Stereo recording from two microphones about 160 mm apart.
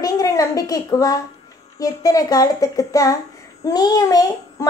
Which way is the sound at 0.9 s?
20° left (ahead or behind).